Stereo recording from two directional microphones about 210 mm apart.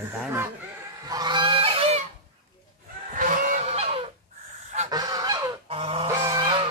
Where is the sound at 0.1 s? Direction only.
5° right (ahead or behind).